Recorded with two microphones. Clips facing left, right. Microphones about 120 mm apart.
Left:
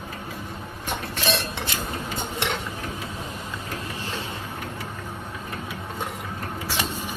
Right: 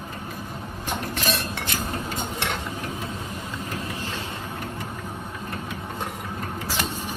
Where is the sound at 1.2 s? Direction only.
25° left (ahead or behind).